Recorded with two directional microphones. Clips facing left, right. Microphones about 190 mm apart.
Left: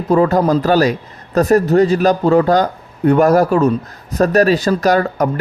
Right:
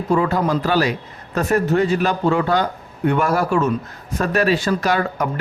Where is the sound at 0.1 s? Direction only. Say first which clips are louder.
Left 6 dB; 40° left (ahead or behind).